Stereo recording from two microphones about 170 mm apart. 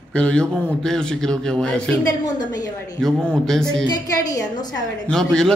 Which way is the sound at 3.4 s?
5° left (ahead or behind).